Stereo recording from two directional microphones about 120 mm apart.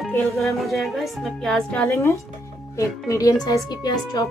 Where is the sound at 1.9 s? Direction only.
25° left (ahead or behind).